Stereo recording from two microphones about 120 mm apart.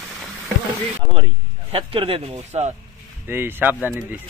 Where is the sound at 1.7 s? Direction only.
50° right (ahead or behind).